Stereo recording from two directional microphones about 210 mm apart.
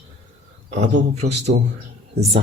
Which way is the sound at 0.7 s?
30° right (ahead or behind).